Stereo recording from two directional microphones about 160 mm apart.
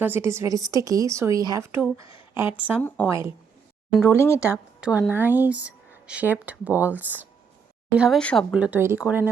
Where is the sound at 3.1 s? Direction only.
15° right (ahead or behind).